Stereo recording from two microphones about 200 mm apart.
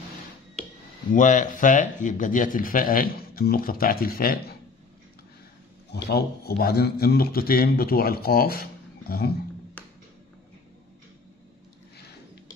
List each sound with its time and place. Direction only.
1.1 s speech: 40° left (ahead or behind)
5.9 s speech: 55° left (ahead or behind)
9.8 s music: 10° left (ahead or behind)